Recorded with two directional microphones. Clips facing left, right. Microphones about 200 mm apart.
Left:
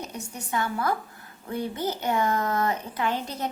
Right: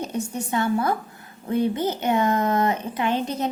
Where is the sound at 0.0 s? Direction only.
25° right (ahead or behind).